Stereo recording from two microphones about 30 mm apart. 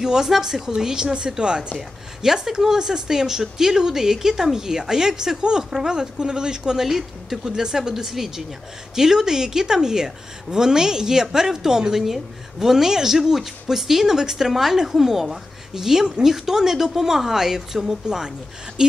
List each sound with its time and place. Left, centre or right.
0.0 s speech: centre
1.8 s speech: centre
7.9 s a woman's voice: centre
18.0 s speech: right